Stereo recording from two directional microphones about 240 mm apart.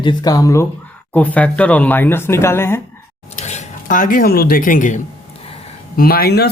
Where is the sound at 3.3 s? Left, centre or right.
Left.